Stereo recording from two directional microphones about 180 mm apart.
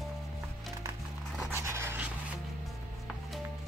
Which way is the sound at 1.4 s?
15° right (ahead or behind).